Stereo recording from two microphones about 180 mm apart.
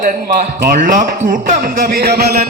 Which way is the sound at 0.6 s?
50° right (ahead or behind).